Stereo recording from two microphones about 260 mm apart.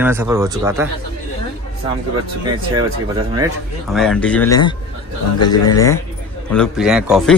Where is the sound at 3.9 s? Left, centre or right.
Centre.